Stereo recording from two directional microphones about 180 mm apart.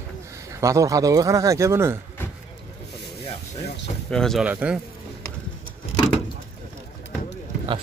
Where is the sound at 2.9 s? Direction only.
25° left (ahead or behind).